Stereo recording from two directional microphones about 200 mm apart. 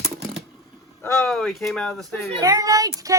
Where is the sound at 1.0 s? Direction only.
5° left (ahead or behind).